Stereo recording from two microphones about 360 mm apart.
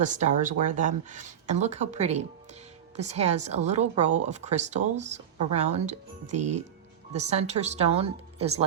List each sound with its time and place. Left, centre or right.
0.0 s a woman's voice: centre